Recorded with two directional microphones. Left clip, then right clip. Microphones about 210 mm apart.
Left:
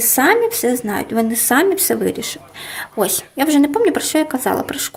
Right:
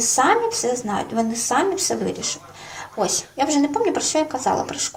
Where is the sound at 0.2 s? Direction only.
60° left (ahead or behind).